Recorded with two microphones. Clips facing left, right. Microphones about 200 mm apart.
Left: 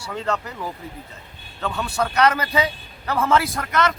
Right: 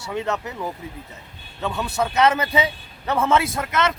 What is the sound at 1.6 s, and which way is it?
A man's voice, 20° right (ahead or behind).